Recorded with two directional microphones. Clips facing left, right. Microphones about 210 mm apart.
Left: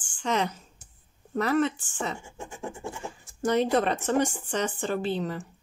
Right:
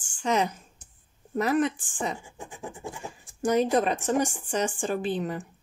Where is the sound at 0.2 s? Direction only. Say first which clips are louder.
Right 2 dB; 10° right (ahead or behind).